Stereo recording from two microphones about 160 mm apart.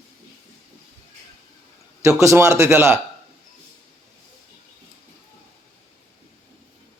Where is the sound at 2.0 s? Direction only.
20° right (ahead or behind).